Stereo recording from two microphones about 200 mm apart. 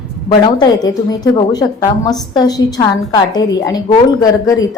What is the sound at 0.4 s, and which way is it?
A woman's voice, 20° left (ahead or behind).